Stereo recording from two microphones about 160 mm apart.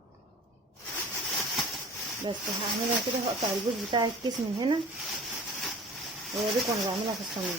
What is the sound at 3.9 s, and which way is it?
Speech, 30° right (ahead or behind).